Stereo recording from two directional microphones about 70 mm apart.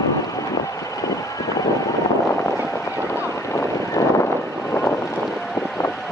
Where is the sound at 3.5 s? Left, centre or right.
Left.